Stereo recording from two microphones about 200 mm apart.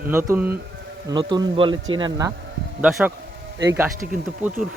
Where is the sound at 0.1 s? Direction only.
15° right (ahead or behind).